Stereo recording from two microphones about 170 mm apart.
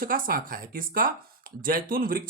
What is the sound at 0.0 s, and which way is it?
Speech, 55° right (ahead or behind).